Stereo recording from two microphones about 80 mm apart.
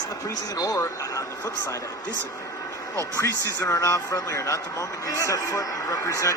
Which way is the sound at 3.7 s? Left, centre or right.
Left.